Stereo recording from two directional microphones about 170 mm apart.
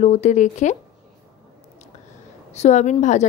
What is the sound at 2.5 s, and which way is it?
Speech, 40° left (ahead or behind).